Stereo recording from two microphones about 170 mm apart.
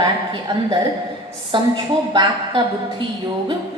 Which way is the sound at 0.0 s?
25° right (ahead or behind).